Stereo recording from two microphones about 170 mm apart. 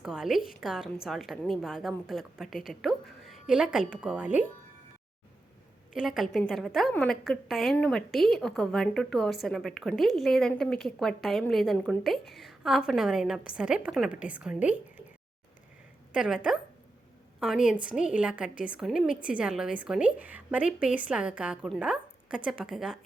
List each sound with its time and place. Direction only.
0.0 s a woman's voice: centre (ahead or behind)
5.9 s a woman's voice: centre (ahead or behind)
16.1 s a woman's voice: 5° right (ahead or behind)
17.6 s a woman's voice: 50° left (ahead or behind)
17.9 s a woman's voice: 5° right (ahead or behind)